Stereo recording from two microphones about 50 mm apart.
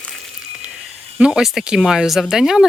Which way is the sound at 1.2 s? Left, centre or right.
Centre.